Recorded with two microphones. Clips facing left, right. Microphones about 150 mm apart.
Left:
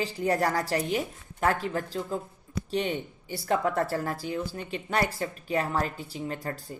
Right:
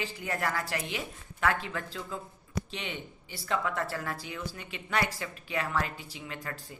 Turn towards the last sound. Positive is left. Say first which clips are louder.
# left 7 dB
turn(degrees=35)  # may be behind; listen again after turning